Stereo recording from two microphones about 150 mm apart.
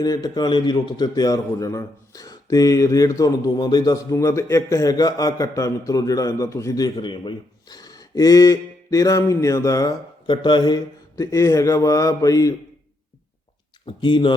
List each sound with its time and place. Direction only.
0.0 s a man's voice: 25° left (ahead or behind)
10.2 s a man's voice: 30° left (ahead or behind)
13.8 s speech: 35° left (ahead or behind)